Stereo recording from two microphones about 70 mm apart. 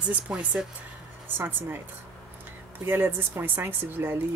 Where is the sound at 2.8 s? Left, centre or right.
Right.